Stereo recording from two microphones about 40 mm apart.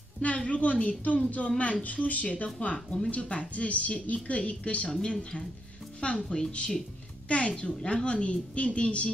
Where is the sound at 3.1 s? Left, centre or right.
Left.